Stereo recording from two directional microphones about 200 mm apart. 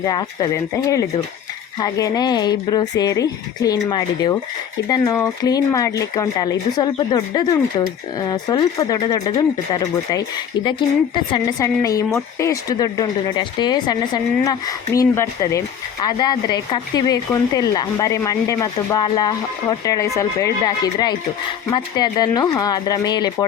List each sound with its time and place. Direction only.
0.0 s speech: 20° left (ahead or behind)